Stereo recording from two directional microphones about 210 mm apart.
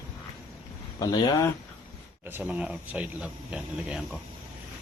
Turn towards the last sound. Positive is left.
turn(degrees=-5)  # may be behind; listen again after turning